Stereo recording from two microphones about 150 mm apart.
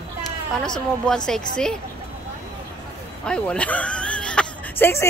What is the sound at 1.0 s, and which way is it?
Speech, 5° left (ahead or behind).